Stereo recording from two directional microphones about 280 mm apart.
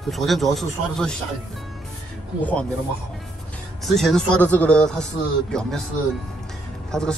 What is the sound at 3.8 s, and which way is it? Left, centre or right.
Speech, centre.